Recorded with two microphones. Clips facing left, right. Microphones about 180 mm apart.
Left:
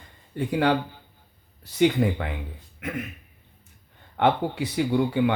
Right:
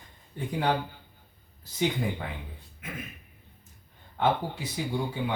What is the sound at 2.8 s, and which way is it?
Speech, 70° left (ahead or behind).